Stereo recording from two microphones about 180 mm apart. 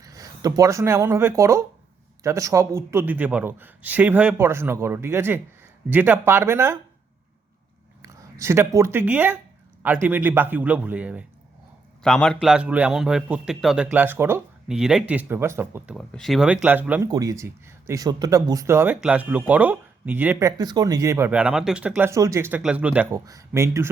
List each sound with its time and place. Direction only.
0.0 s speech: 20° right (ahead or behind)
8.0 s speech: 15° right (ahead or behind)
12.0 s speech: 5° left (ahead or behind); by 16.0 s 15° right (ahead or behind)
16.0 s speech: 5° left (ahead or behind)
17.1 s speech: 20° right (ahead or behind)